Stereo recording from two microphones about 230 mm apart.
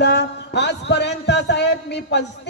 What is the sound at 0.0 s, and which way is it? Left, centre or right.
A woman's voice, left.